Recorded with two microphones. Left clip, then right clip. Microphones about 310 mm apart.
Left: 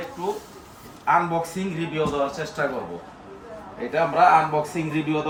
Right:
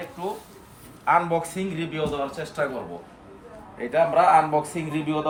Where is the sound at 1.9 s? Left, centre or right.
Centre.